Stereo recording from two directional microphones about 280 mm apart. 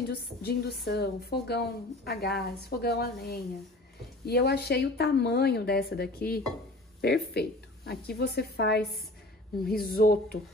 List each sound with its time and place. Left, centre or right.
0.1 s a woman's voice: left